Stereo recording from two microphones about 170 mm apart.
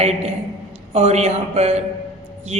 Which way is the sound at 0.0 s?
40° right (ahead or behind).